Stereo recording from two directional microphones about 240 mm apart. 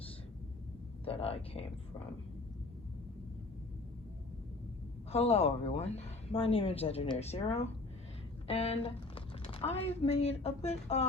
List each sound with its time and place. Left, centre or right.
1.0 s a woman's voice: left
5.1 s a woman's voice: left